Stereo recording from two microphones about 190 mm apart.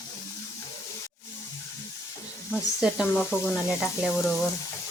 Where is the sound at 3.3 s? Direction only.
15° left (ahead or behind).